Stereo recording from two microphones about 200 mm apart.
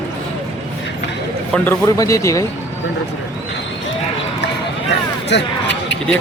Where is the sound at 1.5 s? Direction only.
10° left (ahead or behind).